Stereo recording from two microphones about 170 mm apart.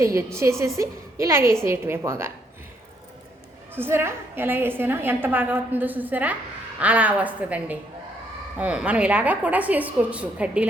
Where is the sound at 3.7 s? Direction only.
15° right (ahead or behind).